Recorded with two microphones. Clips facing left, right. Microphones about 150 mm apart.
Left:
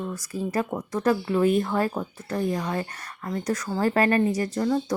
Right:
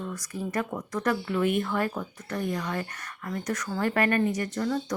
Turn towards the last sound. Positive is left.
turn(degrees=30)  # may be behind; listen again after turning